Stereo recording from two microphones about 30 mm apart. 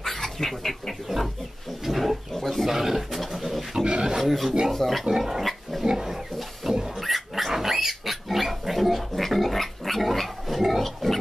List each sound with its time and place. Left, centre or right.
0.0 s a sound: centre
1.0 s speech: centre
2.3 s roaring cats: centre
2.6 s speech: centre
3.8 s speech: right
4.2 s speech: centre
5.1 s pig: centre
5.9 s speech: centre
6.6 s a sound: centre
7.0 s pig: centre